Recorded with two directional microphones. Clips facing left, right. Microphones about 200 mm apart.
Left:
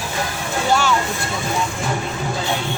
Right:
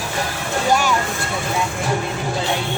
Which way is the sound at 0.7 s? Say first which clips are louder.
Even; 15° right (ahead or behind).